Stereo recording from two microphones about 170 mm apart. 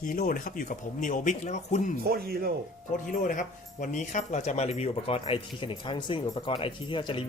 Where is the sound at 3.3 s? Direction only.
50° left (ahead or behind).